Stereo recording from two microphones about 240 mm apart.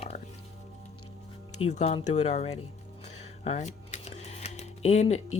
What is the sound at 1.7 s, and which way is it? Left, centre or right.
Speech, left.